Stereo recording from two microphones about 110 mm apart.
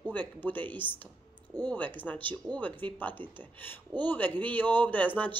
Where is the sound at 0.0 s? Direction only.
15° left (ahead or behind).